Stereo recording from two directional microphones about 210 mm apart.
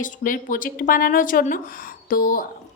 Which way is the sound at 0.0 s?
40° left (ahead or behind).